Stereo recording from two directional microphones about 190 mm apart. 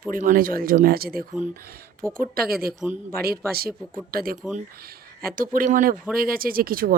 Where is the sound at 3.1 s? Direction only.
55° right (ahead or behind).